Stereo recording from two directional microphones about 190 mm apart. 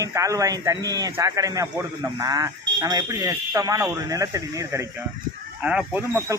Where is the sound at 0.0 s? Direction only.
15° right (ahead or behind).